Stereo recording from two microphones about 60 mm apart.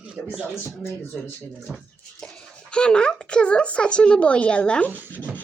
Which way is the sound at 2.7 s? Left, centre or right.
Centre.